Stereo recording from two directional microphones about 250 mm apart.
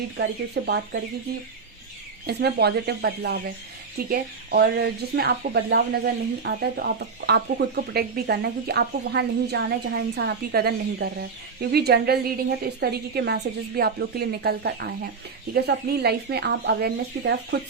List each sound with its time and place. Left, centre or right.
0.2 s a woman's voice: right
2.2 s a woman's voice: right